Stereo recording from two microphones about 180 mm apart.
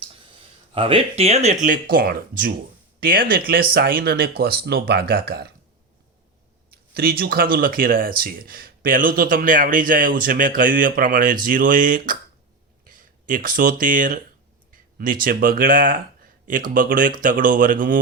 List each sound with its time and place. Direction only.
0.7 s speech: 30° right (ahead or behind)
1.6 s speech: 50° right (ahead or behind)
6.7 s speech: 60° right (ahead or behind)